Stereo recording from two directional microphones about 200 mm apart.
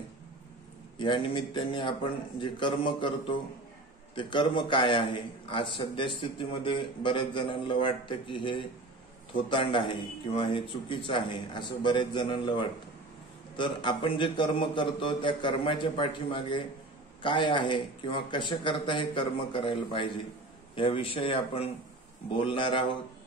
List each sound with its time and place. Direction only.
0.9 s a man's voice: 25° left (ahead or behind)